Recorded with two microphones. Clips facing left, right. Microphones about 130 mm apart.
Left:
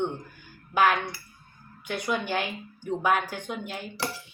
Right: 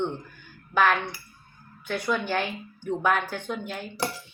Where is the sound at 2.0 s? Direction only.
15° left (ahead or behind).